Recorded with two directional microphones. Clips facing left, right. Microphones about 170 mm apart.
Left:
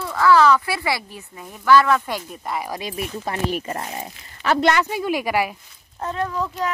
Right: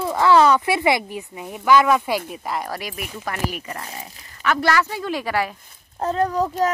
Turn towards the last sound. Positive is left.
turn(degrees=-40)  # may be behind; listen again after turning